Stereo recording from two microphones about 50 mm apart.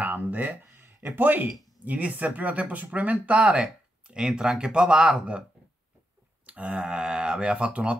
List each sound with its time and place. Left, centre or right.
0.0 s speech: right
0.7 s a sound: right
1.9 s speech: right
4.1 s speech: centre
6.4 s speech: right